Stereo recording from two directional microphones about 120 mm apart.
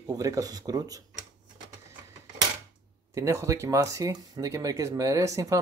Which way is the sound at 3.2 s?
25° right (ahead or behind).